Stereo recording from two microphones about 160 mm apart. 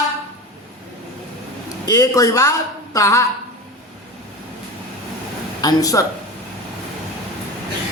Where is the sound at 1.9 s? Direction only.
20° left (ahead or behind).